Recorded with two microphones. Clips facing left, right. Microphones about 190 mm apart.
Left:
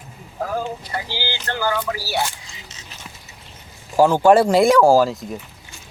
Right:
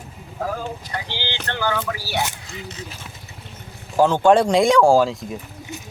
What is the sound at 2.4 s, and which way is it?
Speech, 55° right (ahead or behind).